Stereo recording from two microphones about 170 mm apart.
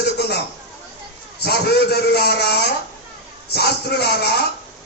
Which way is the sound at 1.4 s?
70° left (ahead or behind).